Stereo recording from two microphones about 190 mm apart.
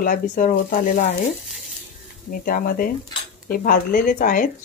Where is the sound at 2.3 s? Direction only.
50° left (ahead or behind).